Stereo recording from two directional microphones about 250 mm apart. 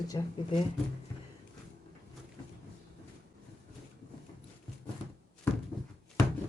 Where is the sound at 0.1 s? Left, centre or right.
Centre.